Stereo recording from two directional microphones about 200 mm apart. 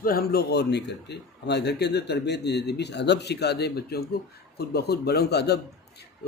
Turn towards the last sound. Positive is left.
turn(degrees=55)  # may be behind; listen again after turning